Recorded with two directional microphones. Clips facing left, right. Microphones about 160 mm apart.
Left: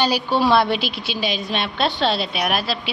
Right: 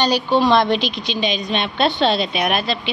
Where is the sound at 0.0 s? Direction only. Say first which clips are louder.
Right 2 dB; 10° left (ahead or behind).